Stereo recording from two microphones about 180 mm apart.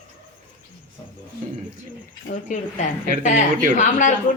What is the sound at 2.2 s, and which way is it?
A woman's voice, 45° left (ahead or behind).